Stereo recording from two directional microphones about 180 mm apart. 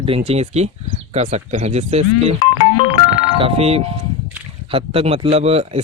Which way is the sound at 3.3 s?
35° right (ahead or behind).